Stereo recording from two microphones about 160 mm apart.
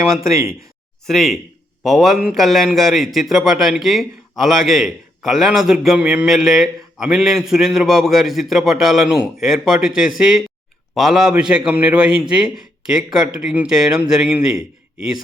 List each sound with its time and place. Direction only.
0.0 s speech: 20° right (ahead or behind)
1.0 s a man's voice: centre (ahead or behind)